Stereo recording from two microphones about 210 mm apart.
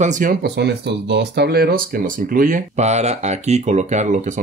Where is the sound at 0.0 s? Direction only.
40° right (ahead or behind).